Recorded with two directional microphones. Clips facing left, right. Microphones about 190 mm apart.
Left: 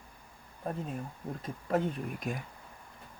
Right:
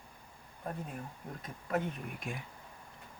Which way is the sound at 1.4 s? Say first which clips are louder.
Left 4 dB; 30° left (ahead or behind).